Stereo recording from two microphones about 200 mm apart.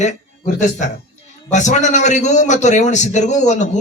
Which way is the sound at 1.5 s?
35° left (ahead or behind).